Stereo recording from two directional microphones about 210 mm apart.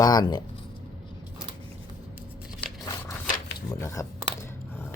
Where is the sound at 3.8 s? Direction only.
15° left (ahead or behind).